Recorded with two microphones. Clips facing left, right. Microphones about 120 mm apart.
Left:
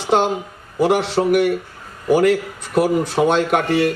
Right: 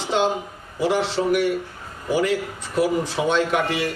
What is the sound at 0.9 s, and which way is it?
Speech, 55° left (ahead or behind).